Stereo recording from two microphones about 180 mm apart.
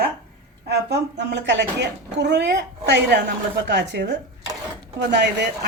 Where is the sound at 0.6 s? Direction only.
70° right (ahead or behind).